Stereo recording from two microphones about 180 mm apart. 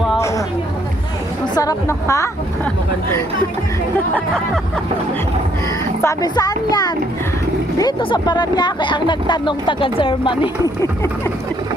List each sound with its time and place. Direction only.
0.2 s a sound: 15° left (ahead or behind)
1.5 s a woman's voice: 20° left (ahead or behind)
6.0 s speech: 20° left (ahead or behind)